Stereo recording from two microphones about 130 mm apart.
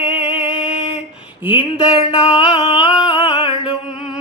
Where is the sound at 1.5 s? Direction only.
10° right (ahead or behind).